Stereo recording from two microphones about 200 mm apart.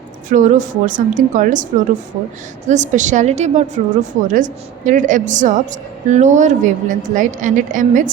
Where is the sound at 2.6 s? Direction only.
35° right (ahead or behind).